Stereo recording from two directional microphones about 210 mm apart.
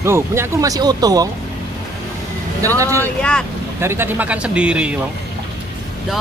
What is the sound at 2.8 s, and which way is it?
Speech, 15° right (ahead or behind).